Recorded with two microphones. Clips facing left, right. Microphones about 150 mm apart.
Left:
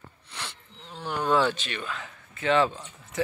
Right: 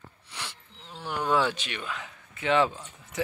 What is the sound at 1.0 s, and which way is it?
Speech, 10° right (ahead or behind).